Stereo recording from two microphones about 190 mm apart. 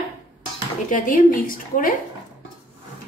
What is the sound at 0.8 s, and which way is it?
A woman's voice, 45° left (ahead or behind).